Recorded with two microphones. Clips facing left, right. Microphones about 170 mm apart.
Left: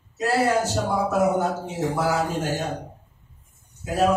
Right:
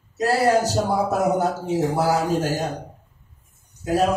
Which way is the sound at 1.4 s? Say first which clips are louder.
Right 4 dB; 40° right (ahead or behind).